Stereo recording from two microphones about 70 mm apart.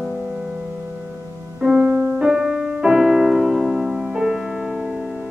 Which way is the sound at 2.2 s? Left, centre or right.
Centre.